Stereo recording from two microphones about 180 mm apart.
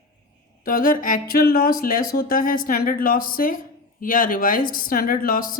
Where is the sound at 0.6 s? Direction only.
50° left (ahead or behind).